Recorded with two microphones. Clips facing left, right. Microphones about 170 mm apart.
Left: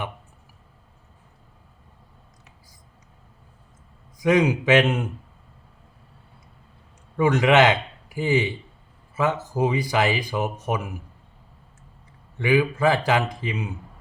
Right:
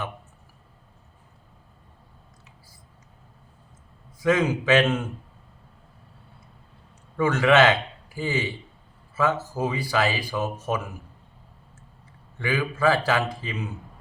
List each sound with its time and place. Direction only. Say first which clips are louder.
4.2 s speech: left 3 dB; 15° left (ahead or behind)
7.2 s speech: left 1 dB; 15° left (ahead or behind)
12.4 s speech: left 5 dB; 15° left (ahead or behind)